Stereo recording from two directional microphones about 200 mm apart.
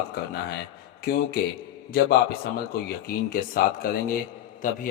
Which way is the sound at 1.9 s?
50° left (ahead or behind).